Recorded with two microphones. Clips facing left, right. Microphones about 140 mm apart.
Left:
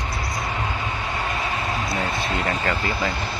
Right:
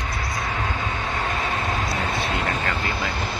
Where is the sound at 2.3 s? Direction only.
Centre (ahead or behind).